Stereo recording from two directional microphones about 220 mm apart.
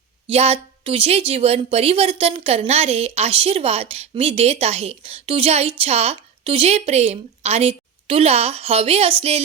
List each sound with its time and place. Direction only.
0.3 s a woman's voice: 25° right (ahead or behind)